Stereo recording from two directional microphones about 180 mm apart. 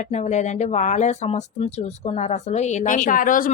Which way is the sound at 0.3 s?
40° left (ahead or behind).